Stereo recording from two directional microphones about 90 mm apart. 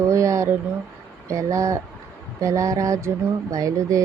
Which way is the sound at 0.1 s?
35° right (ahead or behind).